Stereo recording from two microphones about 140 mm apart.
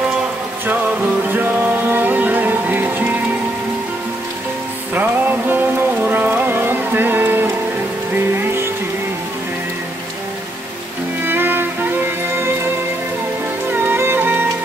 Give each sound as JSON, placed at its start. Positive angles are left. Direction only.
{"t": 0.7, "sound": "music", "side_deg": -10}
{"t": 4.9, "sound": "music", "side_deg": -15}
{"t": 11.2, "sound": "music", "side_deg": -15}
{"t": 13.7, "sound": "music", "side_deg": -15}